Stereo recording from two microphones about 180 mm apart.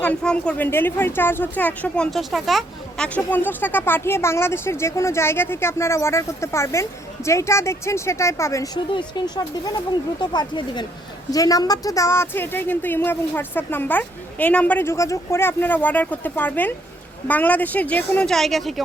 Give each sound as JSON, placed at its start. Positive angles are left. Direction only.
{"t": 0.0, "sound": "a woman's voice", "side_deg": 5}
{"t": 3.2, "sound": "a woman's voice", "side_deg": 10}